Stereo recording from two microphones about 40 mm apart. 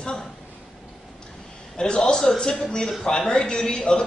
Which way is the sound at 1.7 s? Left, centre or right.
Left.